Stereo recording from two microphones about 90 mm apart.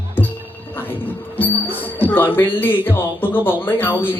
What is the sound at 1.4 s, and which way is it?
Speech, 20° left (ahead or behind).